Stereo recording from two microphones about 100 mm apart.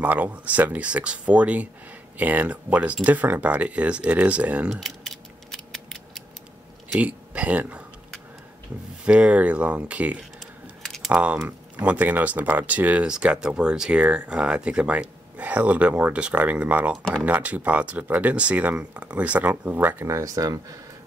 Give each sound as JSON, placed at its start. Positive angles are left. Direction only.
{"t": 0.0, "sound": "speech", "side_deg": -15}
{"t": 4.6, "sound": "a sound", "side_deg": 0}
{"t": 7.0, "sound": "speech", "side_deg": -15}
{"t": 9.0, "sound": "speech", "side_deg": -10}
{"t": 10.4, "sound": "keys jangling", "side_deg": 0}
{"t": 11.1, "sound": "speech", "side_deg": -15}
{"t": 16.9, "sound": "speech", "side_deg": 5}
{"t": 17.2, "sound": "speech", "side_deg": -15}
{"t": 20.1, "sound": "speech", "side_deg": -35}